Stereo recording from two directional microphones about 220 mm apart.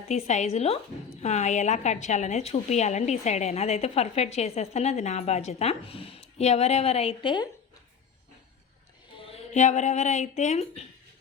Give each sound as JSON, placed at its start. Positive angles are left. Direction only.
{"t": 0.1, "sound": "a woman's voice", "side_deg": 30}
{"t": 9.2, "sound": "speech", "side_deg": 30}